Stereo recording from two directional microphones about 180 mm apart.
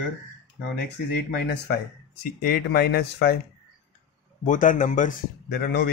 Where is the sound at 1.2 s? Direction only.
70° left (ahead or behind).